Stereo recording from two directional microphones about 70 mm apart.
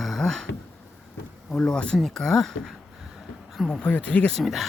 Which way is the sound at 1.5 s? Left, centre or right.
Centre.